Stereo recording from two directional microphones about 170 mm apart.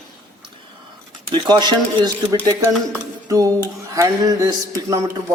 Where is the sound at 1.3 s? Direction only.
25° right (ahead or behind).